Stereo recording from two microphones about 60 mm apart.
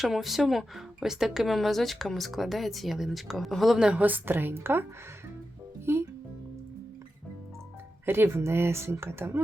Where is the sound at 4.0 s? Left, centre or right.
Right.